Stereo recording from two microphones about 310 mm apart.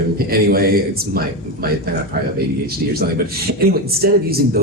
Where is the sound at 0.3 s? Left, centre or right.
Right.